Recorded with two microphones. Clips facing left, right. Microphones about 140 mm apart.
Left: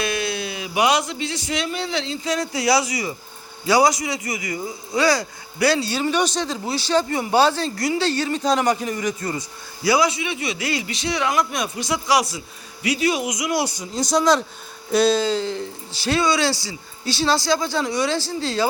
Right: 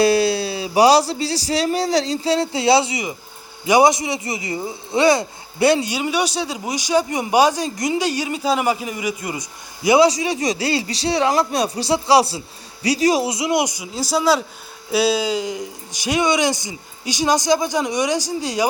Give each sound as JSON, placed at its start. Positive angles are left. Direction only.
{"t": 0.0, "sound": "a man's voice", "side_deg": -30}
{"t": 10.1, "sound": "a man's voice", "side_deg": -35}